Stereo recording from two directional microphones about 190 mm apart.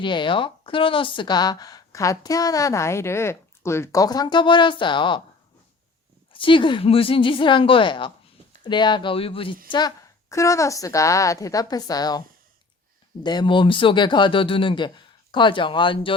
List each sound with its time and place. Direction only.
0.0 s a woman's voice: 25° left (ahead or behind)
6.3 s a woman's voice: 25° left (ahead or behind)
9.7 s a woman's voice: 20° left (ahead or behind)
13.2 s a woman's voice: 25° left (ahead or behind)